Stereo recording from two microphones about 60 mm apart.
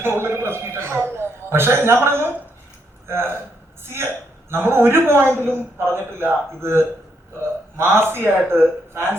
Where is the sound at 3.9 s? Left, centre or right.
Right.